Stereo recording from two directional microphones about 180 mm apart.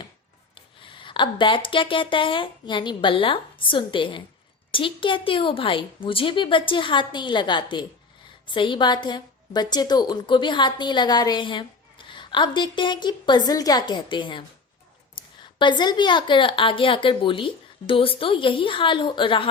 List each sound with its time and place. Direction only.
0.5 s a woman's voice: 30° left (ahead or behind)
15.5 s a woman's voice: 25° left (ahead or behind)